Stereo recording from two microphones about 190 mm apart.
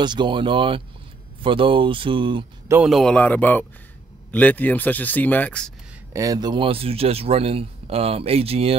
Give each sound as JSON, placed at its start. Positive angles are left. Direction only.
{"t": 0.0, "sound": "speech", "side_deg": -25}
{"t": 2.7, "sound": "speech", "side_deg": -5}
{"t": 6.1, "sound": "speech", "side_deg": -20}